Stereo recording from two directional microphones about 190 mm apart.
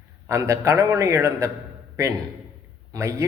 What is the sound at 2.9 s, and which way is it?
Speech, 15° right (ahead or behind).